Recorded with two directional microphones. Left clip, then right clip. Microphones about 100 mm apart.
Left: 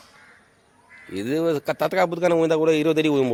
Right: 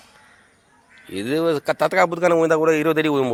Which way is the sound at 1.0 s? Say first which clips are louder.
Right 2 dB; 5° left (ahead or behind).